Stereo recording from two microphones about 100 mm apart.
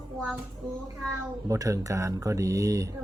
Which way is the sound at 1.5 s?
35° right (ahead or behind).